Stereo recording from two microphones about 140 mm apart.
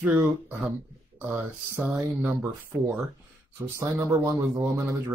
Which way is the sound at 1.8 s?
5° right (ahead or behind).